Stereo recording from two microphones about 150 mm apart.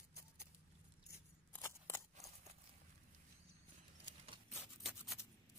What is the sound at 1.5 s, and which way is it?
Scissors, 15° left (ahead or behind).